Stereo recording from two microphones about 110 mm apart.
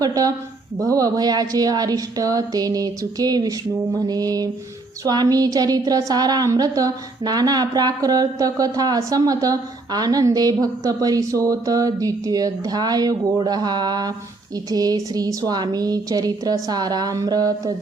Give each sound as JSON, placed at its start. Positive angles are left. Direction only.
{"t": 0.0, "sound": "speech", "side_deg": -35}